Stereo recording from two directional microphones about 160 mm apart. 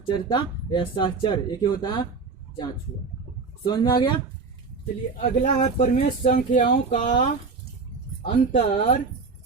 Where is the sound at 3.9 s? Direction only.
30° left (ahead or behind).